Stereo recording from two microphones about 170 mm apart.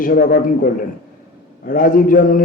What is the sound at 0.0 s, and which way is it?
A man's voice, 55° left (ahead or behind).